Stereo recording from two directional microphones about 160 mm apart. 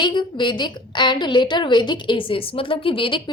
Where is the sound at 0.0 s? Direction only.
30° left (ahead or behind).